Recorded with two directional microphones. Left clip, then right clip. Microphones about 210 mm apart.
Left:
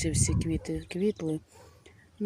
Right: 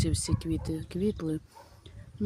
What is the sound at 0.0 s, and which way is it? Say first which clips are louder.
Speech: left 2 dB; centre (ahead or behind).